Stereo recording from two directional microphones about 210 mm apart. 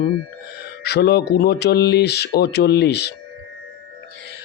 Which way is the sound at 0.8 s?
50° left (ahead or behind).